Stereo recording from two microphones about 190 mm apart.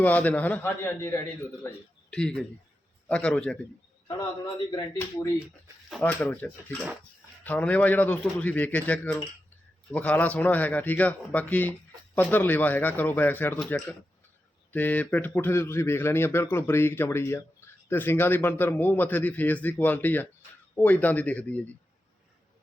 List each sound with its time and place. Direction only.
0.0 s a man's voice: 10° left (ahead or behind)
4.7 s speech: 25° left (ahead or behind)
6.0 s speech: 10° left (ahead or behind)